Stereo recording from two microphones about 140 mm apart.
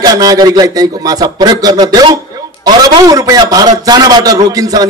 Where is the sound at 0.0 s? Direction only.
25° right (ahead or behind).